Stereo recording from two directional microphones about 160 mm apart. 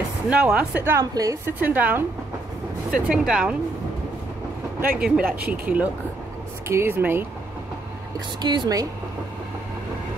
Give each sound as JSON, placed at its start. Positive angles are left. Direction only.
{"t": 0.3, "sound": "a woman's voice", "side_deg": -5}
{"t": 4.9, "sound": "a woman's voice", "side_deg": -5}
{"t": 8.4, "sound": "speech", "side_deg": -25}